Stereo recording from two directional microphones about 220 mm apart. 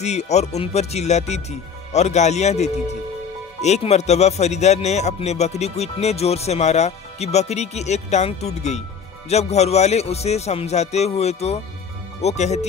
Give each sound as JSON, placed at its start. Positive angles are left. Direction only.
{"t": 0.0, "sound": "speech", "side_deg": 30}